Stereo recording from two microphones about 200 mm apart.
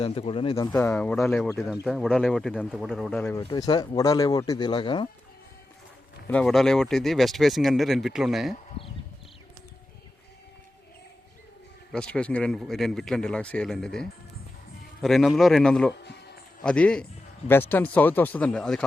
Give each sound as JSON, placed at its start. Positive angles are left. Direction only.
{"t": 0.0, "sound": "speech", "side_deg": 30}
{"t": 0.7, "sound": "speech", "side_deg": 10}
{"t": 3.4, "sound": "speech", "side_deg": 20}
{"t": 6.2, "sound": "speech", "side_deg": 5}
{"t": 11.9, "sound": "speech", "side_deg": 5}